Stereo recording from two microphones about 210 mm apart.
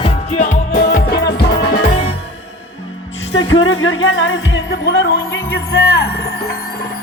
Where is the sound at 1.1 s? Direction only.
55° left (ahead or behind).